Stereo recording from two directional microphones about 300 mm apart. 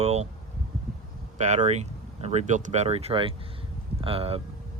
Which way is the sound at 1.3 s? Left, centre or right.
Right.